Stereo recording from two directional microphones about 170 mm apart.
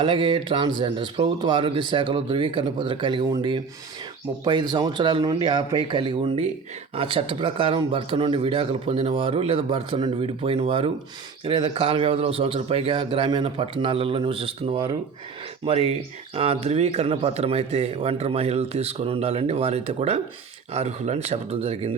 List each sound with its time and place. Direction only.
0.0 s speech: 30° right (ahead or behind)